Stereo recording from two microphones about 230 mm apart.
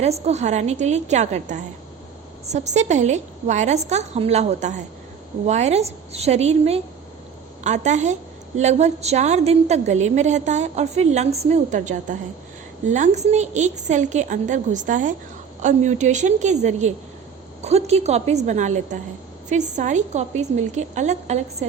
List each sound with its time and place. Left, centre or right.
0.0 s a woman's voice: right